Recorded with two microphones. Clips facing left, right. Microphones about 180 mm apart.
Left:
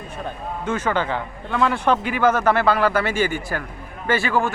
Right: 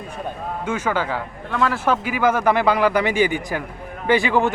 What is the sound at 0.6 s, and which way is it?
A man's voice, 10° right (ahead or behind).